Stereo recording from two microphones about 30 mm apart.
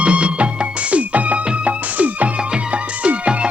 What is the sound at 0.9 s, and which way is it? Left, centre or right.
Music, right.